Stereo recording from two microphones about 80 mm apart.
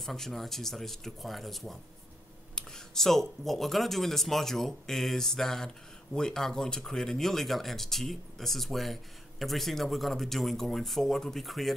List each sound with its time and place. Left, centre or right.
0.0 s speech: centre